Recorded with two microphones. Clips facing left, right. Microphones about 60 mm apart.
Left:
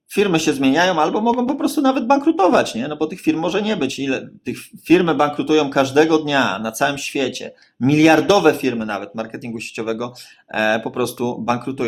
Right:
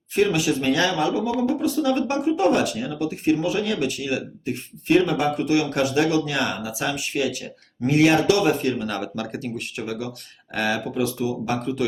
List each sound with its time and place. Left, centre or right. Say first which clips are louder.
0.1 s speech: left 4 dB; left
0.6 s speech: left 8 dB; left
9.1 s speech: left 2 dB; left
9.6 s speech: left 6 dB; left
10.5 s speech: left 6 dB; left